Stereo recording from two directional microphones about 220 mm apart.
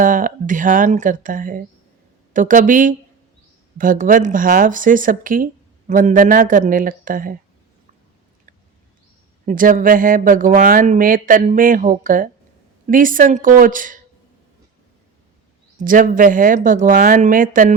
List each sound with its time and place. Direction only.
0.0 s speech: 35° right (ahead or behind)
9.5 s speech: 35° right (ahead or behind)
15.8 s speech: 40° right (ahead or behind)